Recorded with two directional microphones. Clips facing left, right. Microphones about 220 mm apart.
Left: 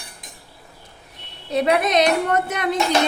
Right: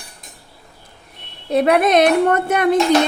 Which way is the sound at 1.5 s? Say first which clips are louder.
Right 5 dB; 55° right (ahead or behind).